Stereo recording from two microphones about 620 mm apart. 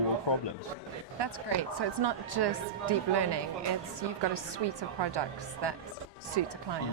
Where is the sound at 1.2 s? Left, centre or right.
Right.